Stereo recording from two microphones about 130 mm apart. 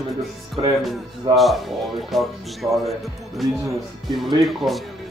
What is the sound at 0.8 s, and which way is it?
Speech, centre (ahead or behind).